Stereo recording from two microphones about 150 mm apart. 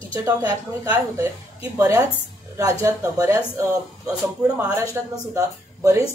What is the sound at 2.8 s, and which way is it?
Speech, 20° right (ahead or behind).